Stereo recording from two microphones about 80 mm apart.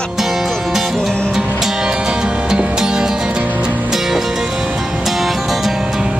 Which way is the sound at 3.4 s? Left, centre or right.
Right.